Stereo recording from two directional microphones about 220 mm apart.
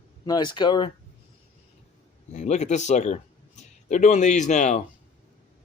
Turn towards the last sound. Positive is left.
turn(degrees=30)  # may be behind; listen again after turning